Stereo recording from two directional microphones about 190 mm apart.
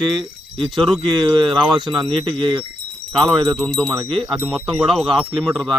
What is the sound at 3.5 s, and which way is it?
Speech, 5° left (ahead or behind).